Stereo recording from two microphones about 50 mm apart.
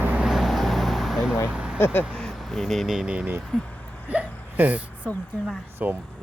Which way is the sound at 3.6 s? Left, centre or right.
Left.